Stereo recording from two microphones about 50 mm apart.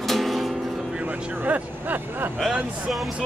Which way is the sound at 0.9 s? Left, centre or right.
Right.